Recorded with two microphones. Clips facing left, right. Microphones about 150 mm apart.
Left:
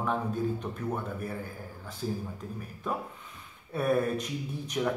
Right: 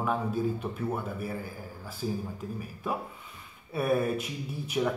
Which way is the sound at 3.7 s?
5° right (ahead or behind).